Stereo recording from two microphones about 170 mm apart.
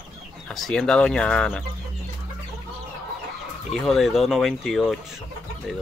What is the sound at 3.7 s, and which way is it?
Speech, centre (ahead or behind).